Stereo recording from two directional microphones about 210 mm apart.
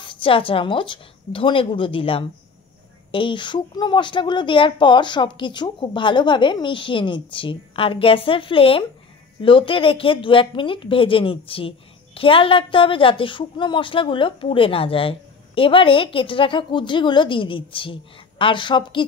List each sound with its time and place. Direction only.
0.0 s a woman's voice: 25° left (ahead or behind)